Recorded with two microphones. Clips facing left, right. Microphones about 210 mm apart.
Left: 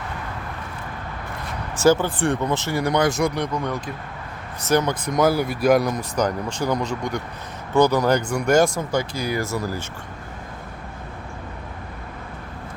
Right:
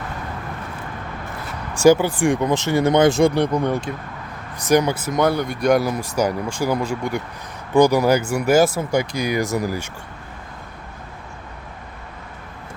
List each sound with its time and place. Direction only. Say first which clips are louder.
1.7 s speech: right 4 dB; 15° right (ahead or behind); by 3.8 s 30° right (ahead or behind)
4.6 s speech: right 3 dB; 15° right (ahead or behind)